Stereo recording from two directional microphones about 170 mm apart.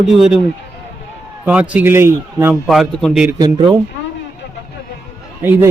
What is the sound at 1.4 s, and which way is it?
A man's voice, 10° right (ahead or behind).